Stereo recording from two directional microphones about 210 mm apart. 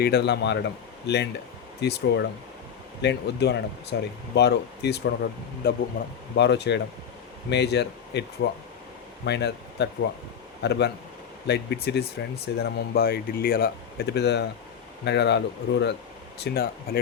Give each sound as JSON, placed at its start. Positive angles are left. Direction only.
{"t": 0.0, "sound": "speech", "side_deg": 50}
{"t": 6.3, "sound": "speech", "side_deg": 55}